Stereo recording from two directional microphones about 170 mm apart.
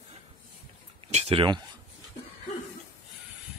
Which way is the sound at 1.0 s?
35° right (ahead or behind).